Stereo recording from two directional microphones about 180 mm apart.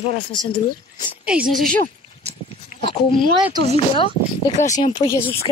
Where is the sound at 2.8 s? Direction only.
30° left (ahead or behind).